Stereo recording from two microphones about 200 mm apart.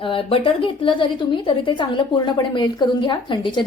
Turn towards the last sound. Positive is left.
turn(degrees=25)  # may be behind; listen again after turning